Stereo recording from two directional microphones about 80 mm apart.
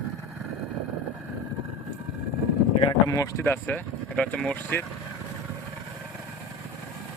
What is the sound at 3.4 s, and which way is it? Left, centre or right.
Speech, left.